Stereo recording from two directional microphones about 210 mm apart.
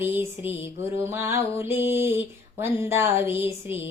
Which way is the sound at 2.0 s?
10° right (ahead or behind).